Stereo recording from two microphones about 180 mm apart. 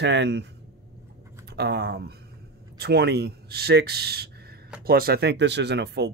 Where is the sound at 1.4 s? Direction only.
65° right (ahead or behind).